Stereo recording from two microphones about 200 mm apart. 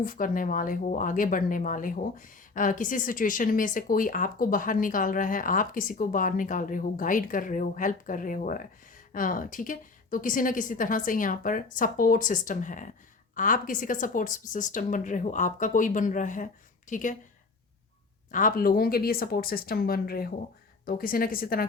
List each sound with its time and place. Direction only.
0.0 s speech: 40° left (ahead or behind)
18.3 s speech: 40° left (ahead or behind)